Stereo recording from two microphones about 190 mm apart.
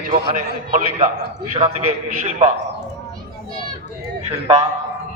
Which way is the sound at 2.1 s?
40° right (ahead or behind).